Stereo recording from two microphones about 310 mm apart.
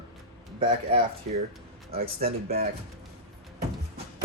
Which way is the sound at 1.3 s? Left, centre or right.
Right.